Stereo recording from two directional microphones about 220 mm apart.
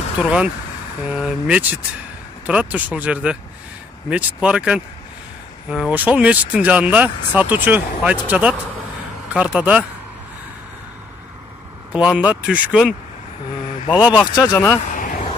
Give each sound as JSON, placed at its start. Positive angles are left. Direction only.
{"t": 0.2, "sound": "speech", "side_deg": -5}
{"t": 11.9, "sound": "speech", "side_deg": -5}
{"t": 14.2, "sound": "speech", "side_deg": 15}
{"t": 14.8, "sound": "vehicle", "side_deg": 35}